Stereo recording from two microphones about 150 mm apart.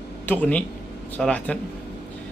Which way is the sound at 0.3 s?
10° left (ahead or behind).